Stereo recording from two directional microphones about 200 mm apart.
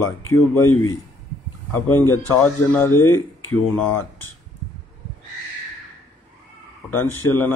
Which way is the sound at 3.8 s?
5° left (ahead or behind).